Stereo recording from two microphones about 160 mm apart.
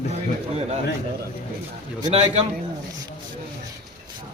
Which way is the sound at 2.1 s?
45° right (ahead or behind).